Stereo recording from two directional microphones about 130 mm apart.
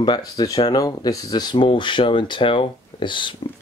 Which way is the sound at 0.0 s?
30° left (ahead or behind).